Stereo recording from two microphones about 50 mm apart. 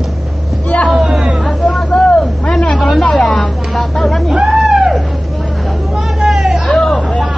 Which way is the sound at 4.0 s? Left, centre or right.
Centre.